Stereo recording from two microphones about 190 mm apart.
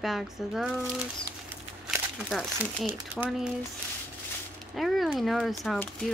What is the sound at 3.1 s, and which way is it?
Speech, 5° right (ahead or behind).